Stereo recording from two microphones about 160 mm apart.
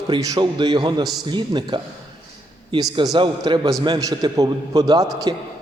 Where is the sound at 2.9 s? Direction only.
30° right (ahead or behind).